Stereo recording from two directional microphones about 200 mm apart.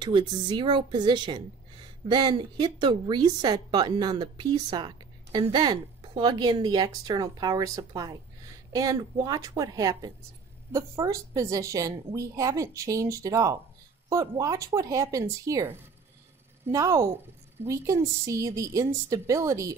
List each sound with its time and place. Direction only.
0.0 s a woman's voice: 20° right (ahead or behind)